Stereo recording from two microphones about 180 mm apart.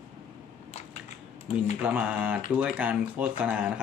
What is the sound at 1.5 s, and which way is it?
Speech, 35° left (ahead or behind).